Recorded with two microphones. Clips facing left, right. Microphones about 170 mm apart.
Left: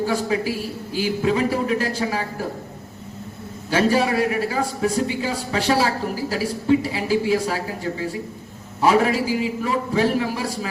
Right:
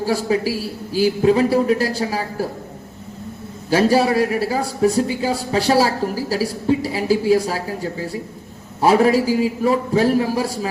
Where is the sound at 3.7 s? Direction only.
35° right (ahead or behind).